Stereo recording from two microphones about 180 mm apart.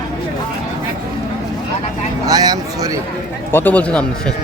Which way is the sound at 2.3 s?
20° right (ahead or behind).